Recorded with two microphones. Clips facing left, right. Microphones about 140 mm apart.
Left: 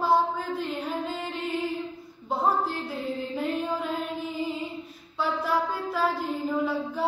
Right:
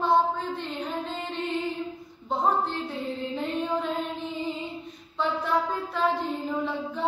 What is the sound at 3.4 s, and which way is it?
Music, 5° left (ahead or behind).